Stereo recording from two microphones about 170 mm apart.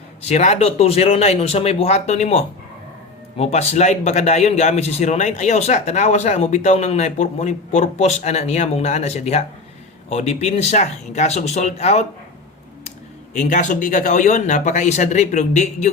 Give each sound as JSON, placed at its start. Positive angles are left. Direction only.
{"t": 0.2, "sound": "a man's voice", "side_deg": 40}
{"t": 13.3, "sound": "speech", "side_deg": 45}